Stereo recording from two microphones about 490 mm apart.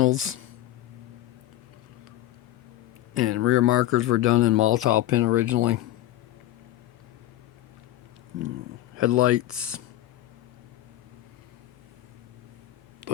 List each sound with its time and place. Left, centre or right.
0.0 s speech: right
3.2 s speech: right
9.0 s speech: right